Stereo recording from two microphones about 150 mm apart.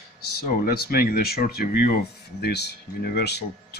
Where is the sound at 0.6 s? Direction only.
85° left.